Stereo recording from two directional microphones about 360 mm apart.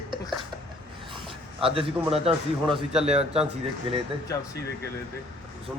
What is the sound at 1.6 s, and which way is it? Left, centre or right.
A man's voice, centre.